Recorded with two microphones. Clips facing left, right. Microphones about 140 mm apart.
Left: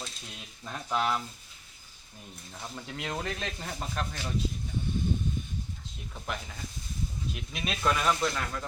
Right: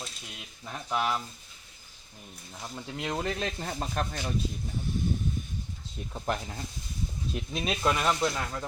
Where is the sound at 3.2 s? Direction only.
30° right (ahead or behind).